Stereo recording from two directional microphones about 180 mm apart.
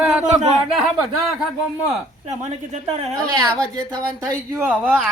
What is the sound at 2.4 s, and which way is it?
Speech, 40° right (ahead or behind).